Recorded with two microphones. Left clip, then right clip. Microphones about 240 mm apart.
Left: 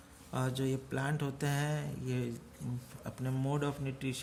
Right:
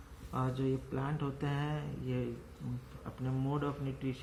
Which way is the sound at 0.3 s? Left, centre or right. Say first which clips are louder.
Even; left.